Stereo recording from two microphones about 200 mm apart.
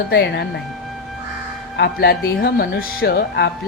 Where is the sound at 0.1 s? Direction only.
55° left (ahead or behind).